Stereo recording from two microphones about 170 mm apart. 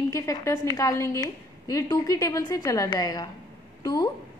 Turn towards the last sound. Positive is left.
turn(degrees=25)  # may be behind; listen again after turning